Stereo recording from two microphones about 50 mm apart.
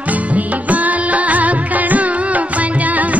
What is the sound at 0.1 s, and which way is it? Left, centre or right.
Music, right.